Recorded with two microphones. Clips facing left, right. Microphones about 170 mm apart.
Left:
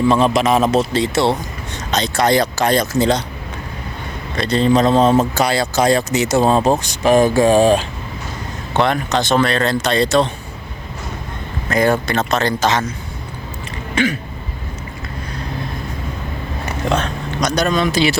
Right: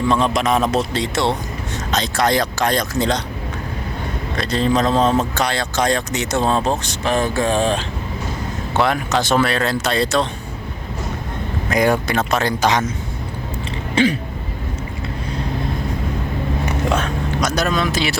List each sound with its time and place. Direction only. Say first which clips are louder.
0.1 s speech: left 3 dB; 5° left (ahead or behind)
4.4 s speech: left 4 dB; centre (ahead or behind)
8.7 s speech: left 2 dB; 5° right (ahead or behind)
11.7 s speech: left 1 dB; 15° right (ahead or behind)
13.9 s a sound: right 2 dB; 30° right (ahead or behind)
16.9 s speech: even; 5° right (ahead or behind)